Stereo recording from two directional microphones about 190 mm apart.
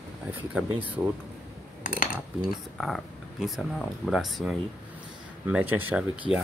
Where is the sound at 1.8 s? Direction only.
45° left (ahead or behind).